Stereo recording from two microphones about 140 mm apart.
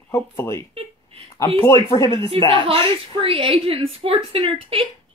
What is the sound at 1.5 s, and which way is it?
Speech, 20° left (ahead or behind).